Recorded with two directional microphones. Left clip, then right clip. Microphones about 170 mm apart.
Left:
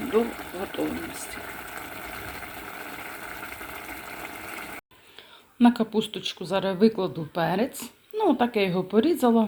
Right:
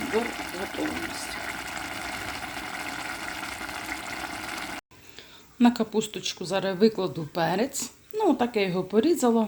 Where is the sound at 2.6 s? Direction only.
25° right (ahead or behind).